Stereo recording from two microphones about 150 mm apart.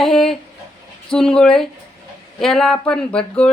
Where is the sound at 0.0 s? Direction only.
Centre (ahead or behind).